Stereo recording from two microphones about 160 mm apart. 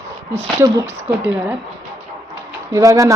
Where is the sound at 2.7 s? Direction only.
20° right (ahead or behind).